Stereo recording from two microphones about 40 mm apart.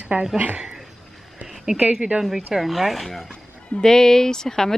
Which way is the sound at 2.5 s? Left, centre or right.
Centre.